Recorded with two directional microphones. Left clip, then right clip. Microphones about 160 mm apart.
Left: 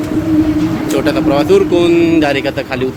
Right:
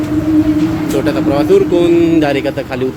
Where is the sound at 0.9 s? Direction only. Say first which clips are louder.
Left 2 dB; 5° right (ahead or behind).